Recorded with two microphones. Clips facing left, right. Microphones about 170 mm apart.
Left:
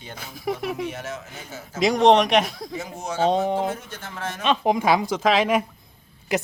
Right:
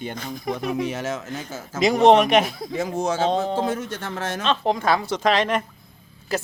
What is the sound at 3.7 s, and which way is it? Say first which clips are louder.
Speech: right 7 dB; 80° right.